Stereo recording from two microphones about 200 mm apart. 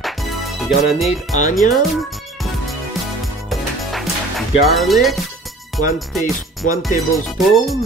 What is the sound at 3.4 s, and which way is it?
Music, centre (ahead or behind).